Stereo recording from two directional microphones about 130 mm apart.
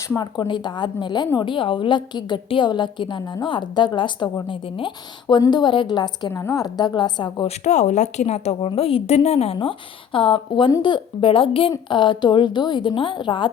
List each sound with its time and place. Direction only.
0.2 s a woman's voice: 35° left (ahead or behind)
7.4 s a woman's voice: 60° left (ahead or behind); by 13.5 s 40° left (ahead or behind)